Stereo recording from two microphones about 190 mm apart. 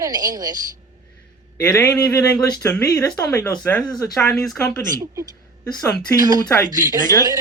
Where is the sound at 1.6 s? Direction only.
15° left (ahead or behind).